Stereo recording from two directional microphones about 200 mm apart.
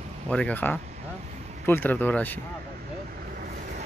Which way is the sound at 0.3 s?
5° left (ahead or behind).